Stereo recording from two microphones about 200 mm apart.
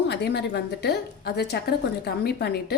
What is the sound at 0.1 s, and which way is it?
A woman's voice, 55° left (ahead or behind).